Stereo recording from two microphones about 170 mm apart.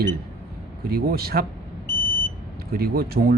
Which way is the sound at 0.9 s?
65° right (ahead or behind).